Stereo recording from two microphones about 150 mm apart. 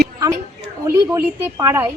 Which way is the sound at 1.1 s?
20° right (ahead or behind).